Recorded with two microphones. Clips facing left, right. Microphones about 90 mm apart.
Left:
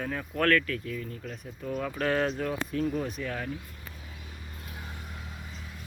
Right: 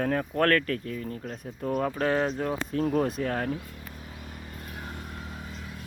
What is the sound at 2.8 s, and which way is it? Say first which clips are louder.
Speech: right 7 dB; 45° right (ahead or behind).